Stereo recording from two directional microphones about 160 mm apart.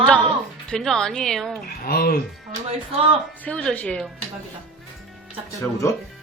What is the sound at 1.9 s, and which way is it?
Speech, 70° left (ahead or behind).